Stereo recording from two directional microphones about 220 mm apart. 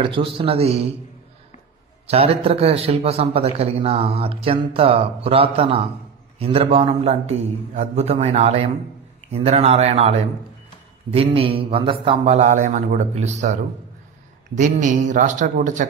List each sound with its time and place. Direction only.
0.0 s a man's voice: 25° right (ahead or behind)
2.0 s a man's voice: 25° right (ahead or behind)